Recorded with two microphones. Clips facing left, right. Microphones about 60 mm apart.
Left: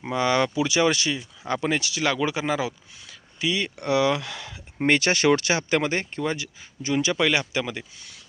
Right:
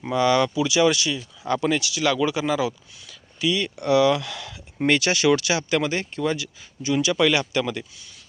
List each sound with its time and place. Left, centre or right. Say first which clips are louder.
0.0 s speech: right 3 dB; left
1.2 s speech: right 3 dB; left
1.8 s speech: right 2 dB; left; by 7.9 s centre